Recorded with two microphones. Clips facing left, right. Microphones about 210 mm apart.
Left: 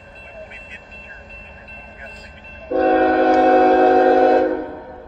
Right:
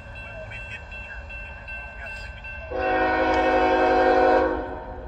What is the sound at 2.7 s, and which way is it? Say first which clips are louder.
Train: left 9 dB; 35° left (ahead or behind).